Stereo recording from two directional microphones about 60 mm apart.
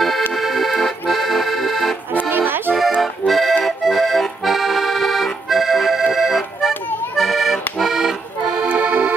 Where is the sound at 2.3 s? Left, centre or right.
Right.